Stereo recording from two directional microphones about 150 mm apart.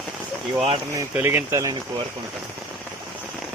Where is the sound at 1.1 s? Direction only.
15° right (ahead or behind).